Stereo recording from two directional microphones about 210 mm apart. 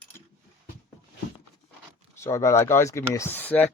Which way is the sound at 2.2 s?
15° left (ahead or behind).